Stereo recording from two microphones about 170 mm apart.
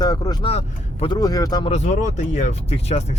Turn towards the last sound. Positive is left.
turn(degrees=40)  # may be behind; listen again after turning